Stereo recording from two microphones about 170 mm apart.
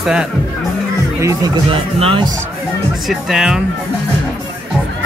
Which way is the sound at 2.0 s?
30° right (ahead or behind).